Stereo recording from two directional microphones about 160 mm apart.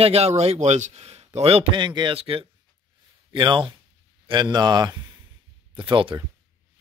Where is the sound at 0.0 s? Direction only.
40° right (ahead or behind).